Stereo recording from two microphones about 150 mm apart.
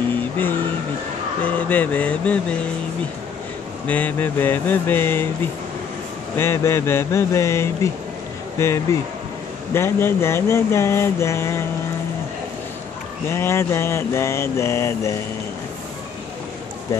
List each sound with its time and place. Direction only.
1.4 s a sound: 10° left (ahead or behind)
3.8 s mantra: 10° left (ahead or behind)
13.3 s mantra: 15° left (ahead or behind)